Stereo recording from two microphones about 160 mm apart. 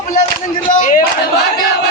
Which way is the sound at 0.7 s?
55° left (ahead or behind).